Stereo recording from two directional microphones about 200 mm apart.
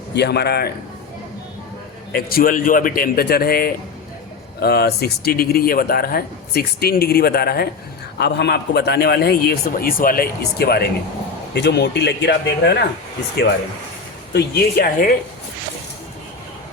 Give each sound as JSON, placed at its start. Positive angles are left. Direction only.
{"t": 0.1, "sound": "speech", "side_deg": 55}
{"t": 2.1, "sound": "speech", "side_deg": 45}
{"t": 14.3, "sound": "speech", "side_deg": 50}